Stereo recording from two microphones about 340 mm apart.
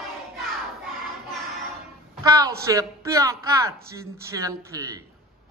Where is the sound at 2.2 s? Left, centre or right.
Centre.